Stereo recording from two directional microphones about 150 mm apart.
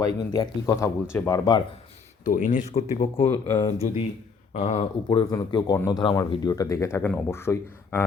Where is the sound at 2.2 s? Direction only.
60° left (ahead or behind).